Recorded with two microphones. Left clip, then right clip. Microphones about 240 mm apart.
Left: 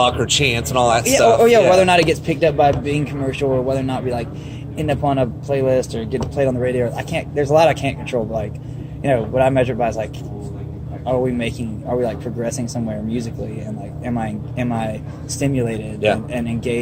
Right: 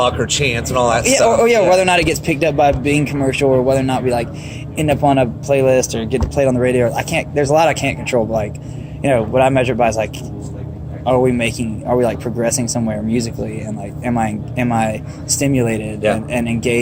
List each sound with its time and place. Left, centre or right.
0.0 s speech: left
1.0 s speech: right